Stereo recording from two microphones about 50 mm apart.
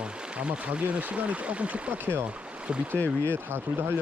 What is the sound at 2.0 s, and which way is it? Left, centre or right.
Speech, right.